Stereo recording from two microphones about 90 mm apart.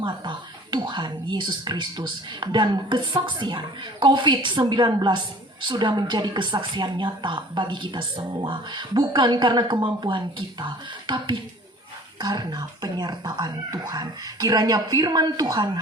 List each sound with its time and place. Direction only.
0.0 s a woman's voice: 60° right (ahead or behind)